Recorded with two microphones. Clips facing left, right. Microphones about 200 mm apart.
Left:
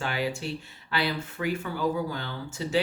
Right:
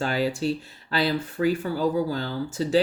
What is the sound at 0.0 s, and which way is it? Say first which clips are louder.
Speech: right 6 dB; 40° right (ahead or behind).